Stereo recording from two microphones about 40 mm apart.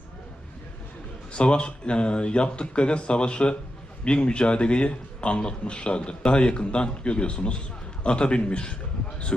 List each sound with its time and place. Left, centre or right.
1.3 s a man's voice: left